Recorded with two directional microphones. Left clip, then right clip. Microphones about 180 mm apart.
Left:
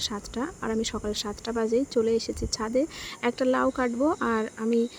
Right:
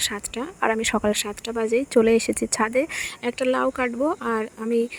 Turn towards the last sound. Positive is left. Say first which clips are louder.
# right 2 dB
turn(degrees=-35)  # may be behind; listen again after turning